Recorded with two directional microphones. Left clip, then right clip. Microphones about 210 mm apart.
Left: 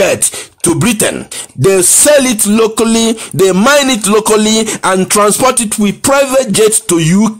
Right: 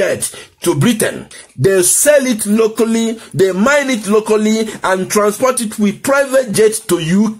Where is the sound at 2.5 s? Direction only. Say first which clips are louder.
Left 2 dB; 35° left (ahead or behind).